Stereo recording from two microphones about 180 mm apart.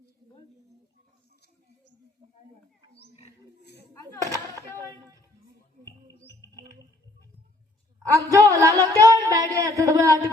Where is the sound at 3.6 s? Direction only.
65° left (ahead or behind).